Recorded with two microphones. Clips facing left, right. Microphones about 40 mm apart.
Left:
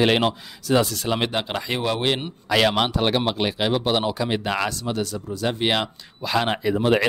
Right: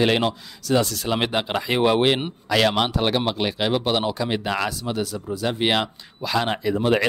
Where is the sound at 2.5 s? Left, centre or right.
Centre.